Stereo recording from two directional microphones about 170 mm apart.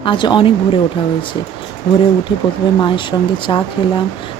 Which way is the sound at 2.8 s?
30° left (ahead or behind).